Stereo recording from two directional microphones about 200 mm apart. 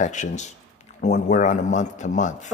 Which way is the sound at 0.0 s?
35° left (ahead or behind).